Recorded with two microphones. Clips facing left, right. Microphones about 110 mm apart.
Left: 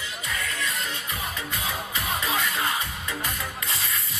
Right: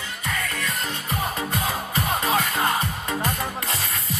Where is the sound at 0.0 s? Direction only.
50° right (ahead or behind).